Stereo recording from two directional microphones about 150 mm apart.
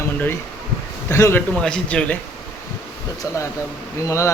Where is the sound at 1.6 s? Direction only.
5° left (ahead or behind).